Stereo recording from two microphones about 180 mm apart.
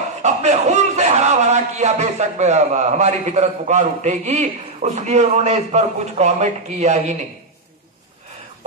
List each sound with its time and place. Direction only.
0.2 s a man's voice: 40° right (ahead or behind)